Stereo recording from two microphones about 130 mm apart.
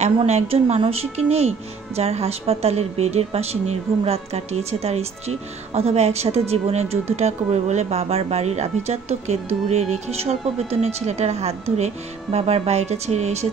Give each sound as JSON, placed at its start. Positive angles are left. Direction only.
{"t": 0.2, "sound": "a woman's voice", "side_deg": -50}